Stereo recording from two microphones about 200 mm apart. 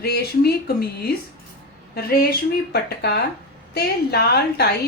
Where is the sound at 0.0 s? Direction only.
55° left (ahead or behind).